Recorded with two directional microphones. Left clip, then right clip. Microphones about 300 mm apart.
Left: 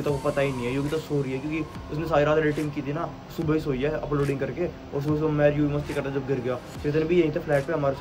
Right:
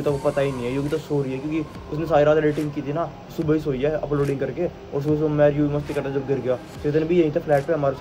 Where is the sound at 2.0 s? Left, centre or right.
Centre.